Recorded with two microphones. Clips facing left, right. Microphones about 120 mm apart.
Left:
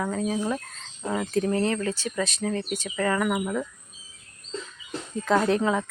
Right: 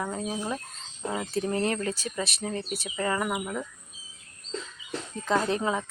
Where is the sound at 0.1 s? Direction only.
20° right (ahead or behind).